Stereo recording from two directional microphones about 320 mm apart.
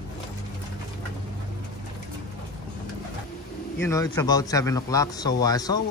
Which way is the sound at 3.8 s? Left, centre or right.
Centre.